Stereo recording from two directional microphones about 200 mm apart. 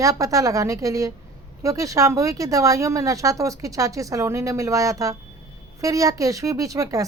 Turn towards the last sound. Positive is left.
turn(degrees=-15)  # may be behind; listen again after turning